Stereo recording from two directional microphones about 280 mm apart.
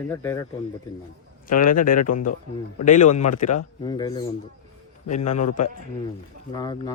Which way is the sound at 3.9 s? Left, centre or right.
Centre.